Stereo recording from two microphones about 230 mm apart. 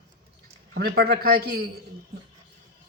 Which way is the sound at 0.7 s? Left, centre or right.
Right.